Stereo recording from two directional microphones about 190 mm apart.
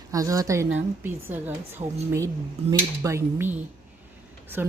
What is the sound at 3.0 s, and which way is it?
Speech, 15° right (ahead or behind).